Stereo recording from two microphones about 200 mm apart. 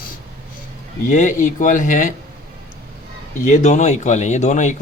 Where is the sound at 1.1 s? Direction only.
40° left (ahead or behind).